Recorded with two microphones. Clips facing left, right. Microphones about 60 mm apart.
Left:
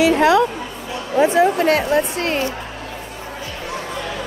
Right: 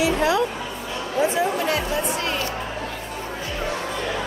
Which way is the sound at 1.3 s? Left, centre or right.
Left.